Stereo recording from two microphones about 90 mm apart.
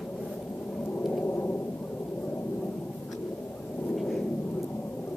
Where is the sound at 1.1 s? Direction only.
20° left (ahead or behind).